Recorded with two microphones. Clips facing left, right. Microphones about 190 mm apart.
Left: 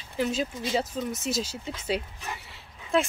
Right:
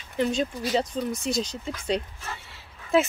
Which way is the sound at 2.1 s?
15° left (ahead or behind).